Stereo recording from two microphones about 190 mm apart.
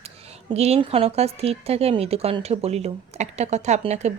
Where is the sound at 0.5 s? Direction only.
35° right (ahead or behind).